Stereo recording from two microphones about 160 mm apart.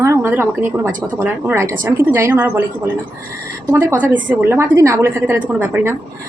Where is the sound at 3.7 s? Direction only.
15° right (ahead or behind).